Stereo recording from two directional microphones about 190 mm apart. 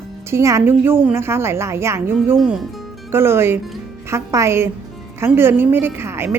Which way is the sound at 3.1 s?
15° right (ahead or behind).